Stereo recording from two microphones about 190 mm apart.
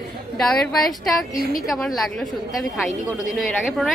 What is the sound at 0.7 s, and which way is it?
A woman's voice, centre (ahead or behind).